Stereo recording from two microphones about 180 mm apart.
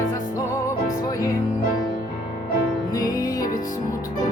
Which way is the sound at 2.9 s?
20° left (ahead or behind).